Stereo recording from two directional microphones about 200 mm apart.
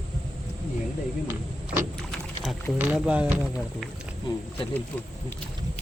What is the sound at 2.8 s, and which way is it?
Speech, 5° right (ahead or behind).